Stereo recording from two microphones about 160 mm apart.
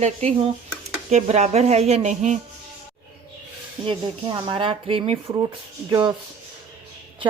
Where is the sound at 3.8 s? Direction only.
30° right (ahead or behind).